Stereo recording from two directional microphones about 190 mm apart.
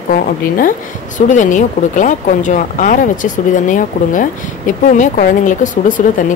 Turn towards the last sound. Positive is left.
turn(degrees=45)  # may be behind; listen again after turning